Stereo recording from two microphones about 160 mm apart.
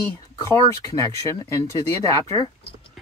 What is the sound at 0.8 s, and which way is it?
Speech, 20° left (ahead or behind).